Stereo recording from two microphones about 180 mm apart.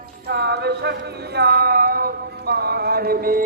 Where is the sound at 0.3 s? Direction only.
70° right (ahead or behind).